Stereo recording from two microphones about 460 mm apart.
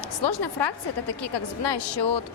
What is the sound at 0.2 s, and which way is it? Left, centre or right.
A woman's voice, left.